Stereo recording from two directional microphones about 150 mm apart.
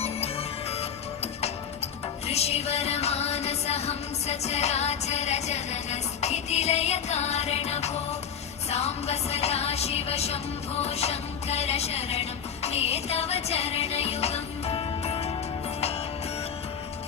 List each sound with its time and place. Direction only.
0.0 s music: 45° left (ahead or behind)